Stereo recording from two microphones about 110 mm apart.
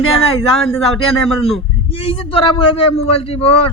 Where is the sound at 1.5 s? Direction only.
60° left (ahead or behind).